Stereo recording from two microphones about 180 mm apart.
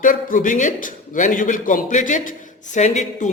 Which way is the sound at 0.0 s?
50° left (ahead or behind).